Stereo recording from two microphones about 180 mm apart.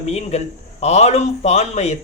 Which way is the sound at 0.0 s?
35° left (ahead or behind).